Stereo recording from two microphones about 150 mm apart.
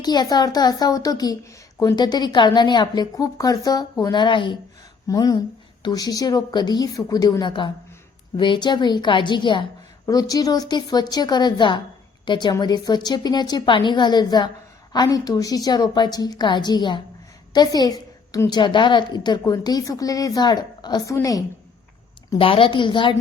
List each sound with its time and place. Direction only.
0.0 s a woman's voice: 25° left (ahead or behind)
22.4 s a woman's voice: 35° left (ahead or behind)